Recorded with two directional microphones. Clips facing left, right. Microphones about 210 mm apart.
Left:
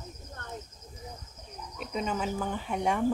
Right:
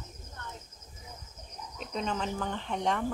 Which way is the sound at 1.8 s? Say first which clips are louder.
Left 2 dB; 5° left (ahead or behind).